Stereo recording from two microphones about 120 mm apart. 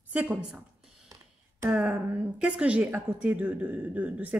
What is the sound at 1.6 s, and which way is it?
Speech, 10° right (ahead or behind).